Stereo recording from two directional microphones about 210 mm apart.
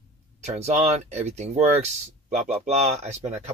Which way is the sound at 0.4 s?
30° right (ahead or behind).